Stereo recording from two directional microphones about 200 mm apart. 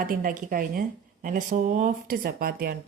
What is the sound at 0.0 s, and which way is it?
Speech, 45° right (ahead or behind).